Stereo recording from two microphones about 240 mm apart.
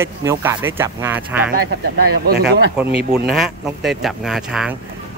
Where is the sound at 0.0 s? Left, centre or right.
Centre.